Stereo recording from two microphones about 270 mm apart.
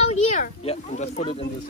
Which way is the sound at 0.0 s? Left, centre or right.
Left.